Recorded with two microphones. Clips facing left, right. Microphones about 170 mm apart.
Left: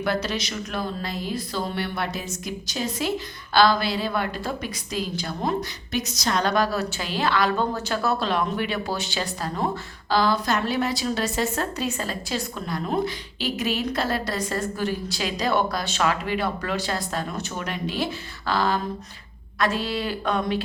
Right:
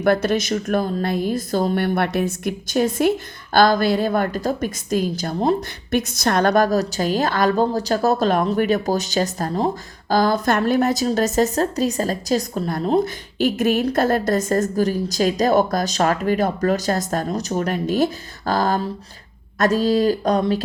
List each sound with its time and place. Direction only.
0.0 s a woman's voice: 50° right (ahead or behind)